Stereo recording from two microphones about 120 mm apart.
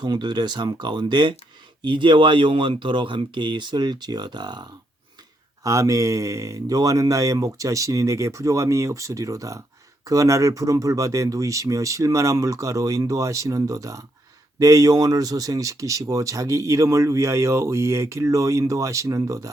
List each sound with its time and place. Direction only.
0.0 s speech: 35° right (ahead or behind)
5.6 s speech: 25° right (ahead or behind)